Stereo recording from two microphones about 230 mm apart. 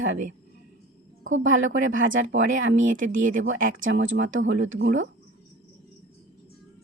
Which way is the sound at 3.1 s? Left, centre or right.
Right.